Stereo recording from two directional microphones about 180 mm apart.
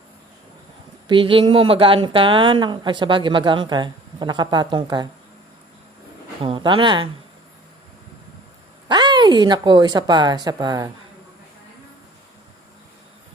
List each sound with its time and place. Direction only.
1.0 s a woman's voice: 30° right (ahead or behind)
6.4 s a woman's voice: 30° right (ahead or behind)
8.9 s a woman's voice: 25° right (ahead or behind)